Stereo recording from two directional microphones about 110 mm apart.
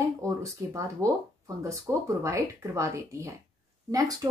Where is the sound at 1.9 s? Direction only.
15° right (ahead or behind).